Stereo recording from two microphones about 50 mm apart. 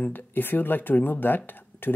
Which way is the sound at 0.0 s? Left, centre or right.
Left.